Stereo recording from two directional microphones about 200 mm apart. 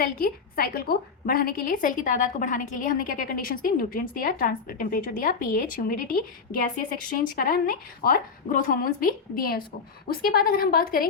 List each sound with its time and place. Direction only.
0.0 s a woman's voice: 45° left (ahead or behind)